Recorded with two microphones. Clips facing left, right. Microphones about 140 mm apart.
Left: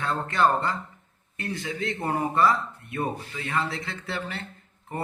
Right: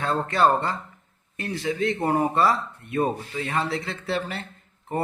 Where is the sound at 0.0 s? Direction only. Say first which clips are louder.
Right 2 dB; 30° right (ahead or behind).